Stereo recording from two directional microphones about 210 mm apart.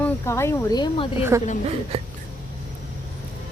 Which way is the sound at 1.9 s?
30° right (ahead or behind).